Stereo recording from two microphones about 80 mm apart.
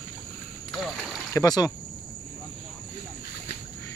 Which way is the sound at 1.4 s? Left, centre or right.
Left.